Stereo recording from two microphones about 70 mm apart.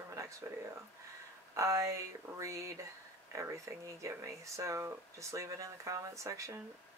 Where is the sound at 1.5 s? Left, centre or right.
Right.